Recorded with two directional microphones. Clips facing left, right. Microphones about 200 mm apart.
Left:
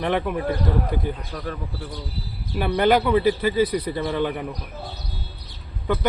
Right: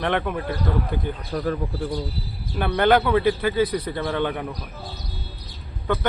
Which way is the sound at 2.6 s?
5° left (ahead or behind).